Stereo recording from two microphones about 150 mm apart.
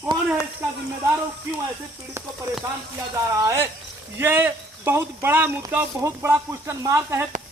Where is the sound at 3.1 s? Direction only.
20° right (ahead or behind).